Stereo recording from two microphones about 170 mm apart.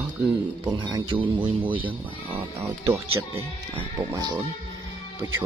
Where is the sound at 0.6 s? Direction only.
25° right (ahead or behind).